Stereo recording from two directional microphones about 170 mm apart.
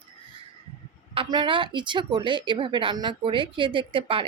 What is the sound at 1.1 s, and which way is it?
A woman's voice, 30° right (ahead or behind).